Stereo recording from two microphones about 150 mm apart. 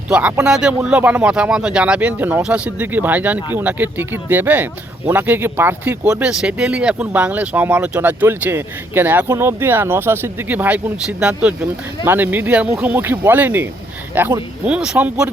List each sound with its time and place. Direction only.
0.1 s speech: 10° right (ahead or behind)